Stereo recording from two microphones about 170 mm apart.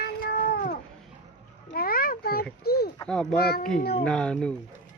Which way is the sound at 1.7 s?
60° left (ahead or behind).